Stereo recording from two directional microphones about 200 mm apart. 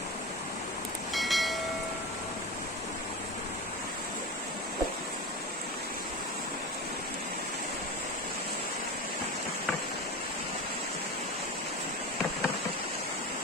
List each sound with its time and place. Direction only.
1.1 s train: centre (ahead or behind)